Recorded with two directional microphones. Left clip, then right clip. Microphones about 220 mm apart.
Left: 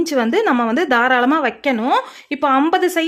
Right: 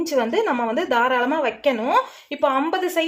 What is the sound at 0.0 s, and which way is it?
A woman's voice, 40° left (ahead or behind).